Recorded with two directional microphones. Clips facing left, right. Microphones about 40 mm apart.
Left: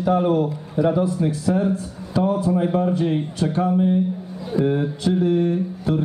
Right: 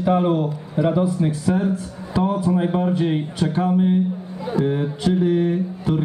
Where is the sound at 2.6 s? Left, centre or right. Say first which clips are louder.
Even; right.